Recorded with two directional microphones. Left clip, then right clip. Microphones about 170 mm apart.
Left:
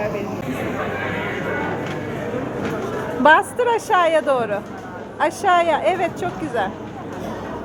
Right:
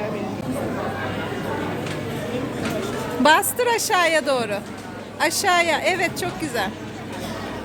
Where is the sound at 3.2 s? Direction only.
20° right (ahead or behind).